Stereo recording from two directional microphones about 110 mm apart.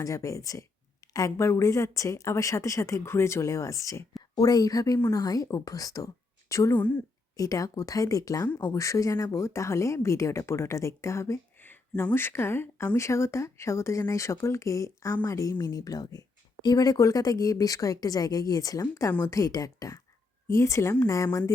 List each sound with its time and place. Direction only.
0.0 s speech: 30° left (ahead or behind)
6.7 s a woman's voice: 15° left (ahead or behind)
7.3 s speech: 30° left (ahead or behind)